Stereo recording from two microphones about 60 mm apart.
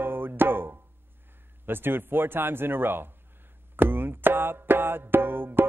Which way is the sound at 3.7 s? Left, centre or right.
Right.